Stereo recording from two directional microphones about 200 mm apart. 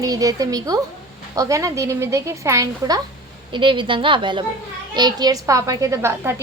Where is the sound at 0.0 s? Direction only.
15° right (ahead or behind).